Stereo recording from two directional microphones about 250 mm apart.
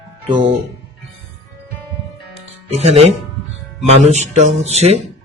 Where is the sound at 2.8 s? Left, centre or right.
Right.